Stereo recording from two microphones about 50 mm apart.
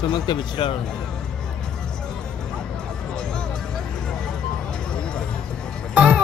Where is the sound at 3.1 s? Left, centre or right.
Centre.